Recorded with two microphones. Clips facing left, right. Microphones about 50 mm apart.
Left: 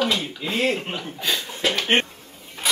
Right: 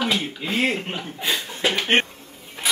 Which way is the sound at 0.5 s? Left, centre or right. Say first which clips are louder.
Even; right.